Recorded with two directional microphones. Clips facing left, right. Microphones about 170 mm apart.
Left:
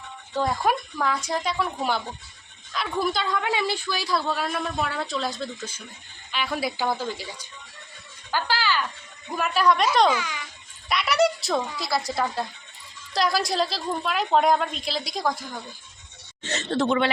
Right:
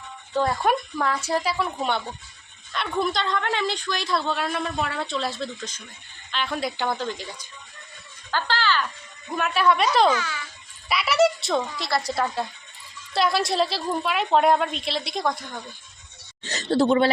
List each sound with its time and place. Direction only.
0.3 s a man's voice: centre (ahead or behind)
8.3 s a sound: 10° left (ahead or behind)
9.3 s a man's voice: centre (ahead or behind)
10.1 s a child's voice: 15° left (ahead or behind)
10.8 s a woman's voice: 5° right (ahead or behind)
16.4 s a woman's voice: 35° right (ahead or behind)